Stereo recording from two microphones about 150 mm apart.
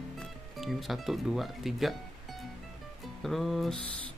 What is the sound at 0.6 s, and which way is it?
Speech, centre (ahead or behind).